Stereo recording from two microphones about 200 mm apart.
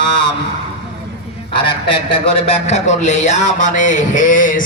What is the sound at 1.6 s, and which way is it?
A man's voice, 25° left (ahead or behind).